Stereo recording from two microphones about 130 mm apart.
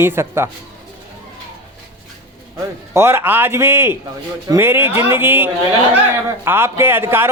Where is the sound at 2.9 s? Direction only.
20° right (ahead or behind).